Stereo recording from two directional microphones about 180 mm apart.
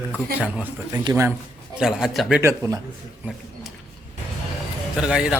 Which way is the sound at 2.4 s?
20° right (ahead or behind).